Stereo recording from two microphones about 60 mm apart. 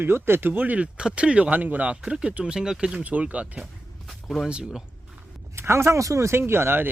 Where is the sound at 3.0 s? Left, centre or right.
Right.